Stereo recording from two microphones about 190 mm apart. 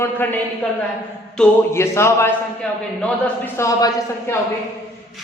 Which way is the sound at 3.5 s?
15° left (ahead or behind).